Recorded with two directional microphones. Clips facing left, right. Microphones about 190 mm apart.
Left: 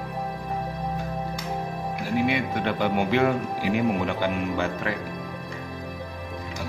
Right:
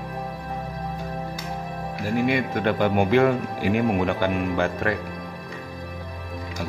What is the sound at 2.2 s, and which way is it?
Speech, 50° right (ahead or behind).